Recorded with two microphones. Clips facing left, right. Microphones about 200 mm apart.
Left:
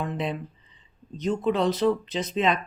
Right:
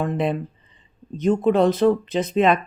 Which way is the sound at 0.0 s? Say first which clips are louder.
Right 7 dB; 55° right (ahead or behind).